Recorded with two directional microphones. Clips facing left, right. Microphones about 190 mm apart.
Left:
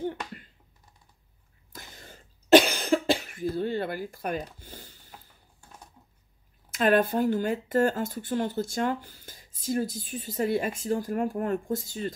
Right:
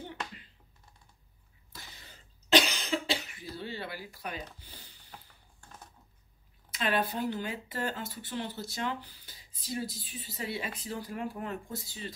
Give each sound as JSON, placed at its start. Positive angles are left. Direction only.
{"t": 1.7, "sound": "cough", "side_deg": 50}
{"t": 5.1, "sound": "a sound", "side_deg": 5}
{"t": 6.7, "sound": "speech", "side_deg": 50}